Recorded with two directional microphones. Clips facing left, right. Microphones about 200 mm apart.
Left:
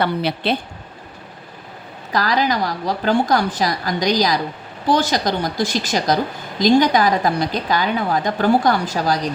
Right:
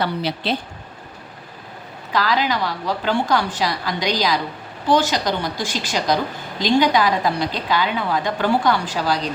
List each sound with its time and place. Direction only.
0.0 s a woman's voice: 55° left (ahead or behind)
2.1 s a woman's voice: 45° left (ahead or behind)